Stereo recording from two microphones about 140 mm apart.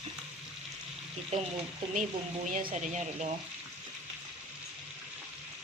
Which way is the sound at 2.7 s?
55° right (ahead or behind).